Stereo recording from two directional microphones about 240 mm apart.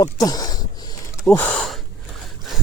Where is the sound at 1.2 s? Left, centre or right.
Centre.